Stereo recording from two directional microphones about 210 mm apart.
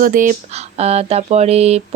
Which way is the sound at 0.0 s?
40° right (ahead or behind).